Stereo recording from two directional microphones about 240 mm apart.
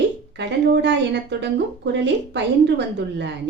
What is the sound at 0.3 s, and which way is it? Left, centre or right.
Speech, right.